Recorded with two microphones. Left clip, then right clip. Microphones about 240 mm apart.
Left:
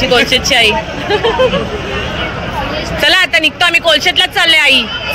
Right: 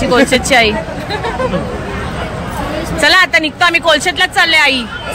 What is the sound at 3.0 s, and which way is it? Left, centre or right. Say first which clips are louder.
Speech: right 1 dB; centre.